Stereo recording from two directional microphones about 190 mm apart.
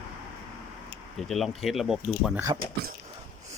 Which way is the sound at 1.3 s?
Centre (ahead or behind).